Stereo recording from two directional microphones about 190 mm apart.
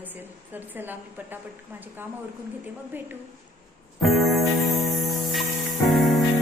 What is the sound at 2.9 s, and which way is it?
Speech, 10° right (ahead or behind).